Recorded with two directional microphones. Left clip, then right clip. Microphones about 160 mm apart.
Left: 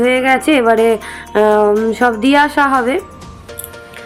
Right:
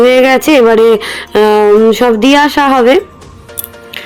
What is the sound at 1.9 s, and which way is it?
Speech, 20° right (ahead or behind).